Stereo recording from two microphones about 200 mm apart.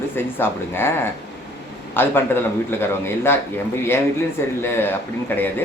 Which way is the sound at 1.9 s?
10° left (ahead or behind).